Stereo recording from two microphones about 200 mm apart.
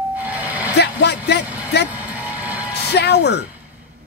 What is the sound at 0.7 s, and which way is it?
Speech, 55° left (ahead or behind).